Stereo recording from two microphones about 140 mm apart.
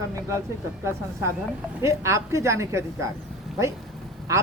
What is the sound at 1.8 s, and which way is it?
A woman's voice, 20° right (ahead or behind).